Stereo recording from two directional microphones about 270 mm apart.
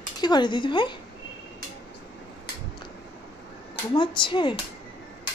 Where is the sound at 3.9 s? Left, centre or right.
Centre.